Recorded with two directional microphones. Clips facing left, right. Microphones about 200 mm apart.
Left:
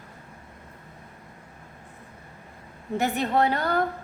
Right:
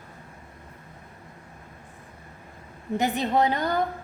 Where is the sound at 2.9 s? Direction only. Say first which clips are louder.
Even; 15° right (ahead or behind).